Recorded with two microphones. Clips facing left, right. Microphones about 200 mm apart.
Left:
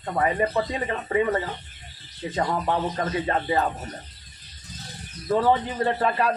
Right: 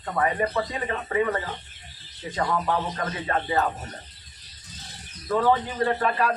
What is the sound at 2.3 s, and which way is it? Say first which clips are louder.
Speech: even; 30° left (ahead or behind).